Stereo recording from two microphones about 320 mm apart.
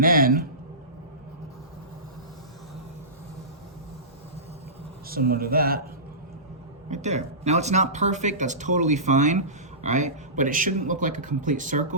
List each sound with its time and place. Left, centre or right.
0.0 s speech: right
5.0 s speech: right
6.9 s speech: right